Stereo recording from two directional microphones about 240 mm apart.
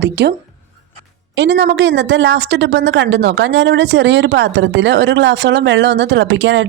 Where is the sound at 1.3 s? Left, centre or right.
Right.